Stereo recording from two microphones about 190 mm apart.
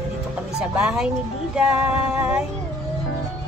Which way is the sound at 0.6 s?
5° right (ahead or behind).